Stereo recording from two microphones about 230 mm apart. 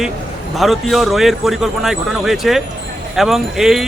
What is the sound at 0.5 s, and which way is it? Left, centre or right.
A man's voice, centre.